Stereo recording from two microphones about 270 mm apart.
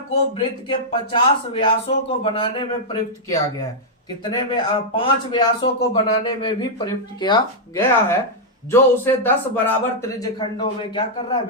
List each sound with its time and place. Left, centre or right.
0.1 s a man's voice: centre